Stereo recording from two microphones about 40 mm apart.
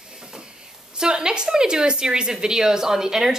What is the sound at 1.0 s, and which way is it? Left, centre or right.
A woman's voice, centre.